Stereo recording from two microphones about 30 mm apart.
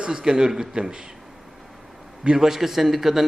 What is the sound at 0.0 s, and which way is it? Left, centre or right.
Speech, right.